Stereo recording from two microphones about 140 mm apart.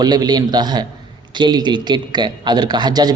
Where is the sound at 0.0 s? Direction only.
30° right (ahead or behind).